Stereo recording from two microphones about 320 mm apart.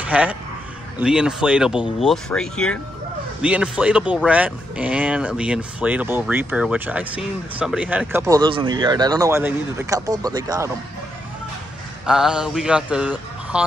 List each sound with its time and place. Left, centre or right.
0.0 s speech: centre
12.1 s speech: centre